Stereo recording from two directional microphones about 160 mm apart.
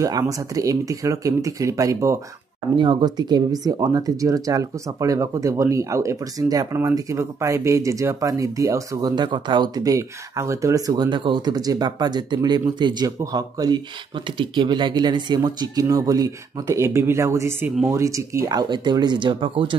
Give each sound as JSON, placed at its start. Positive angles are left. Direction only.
{"t": 0.0, "sound": "speech", "side_deg": -20}